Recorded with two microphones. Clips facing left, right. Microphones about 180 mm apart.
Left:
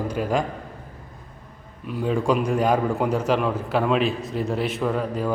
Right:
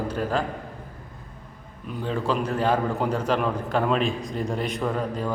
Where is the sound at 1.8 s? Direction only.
5° left (ahead or behind).